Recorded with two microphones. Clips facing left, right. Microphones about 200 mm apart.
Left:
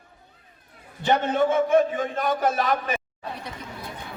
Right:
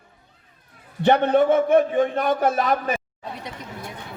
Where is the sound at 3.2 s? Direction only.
20° right (ahead or behind).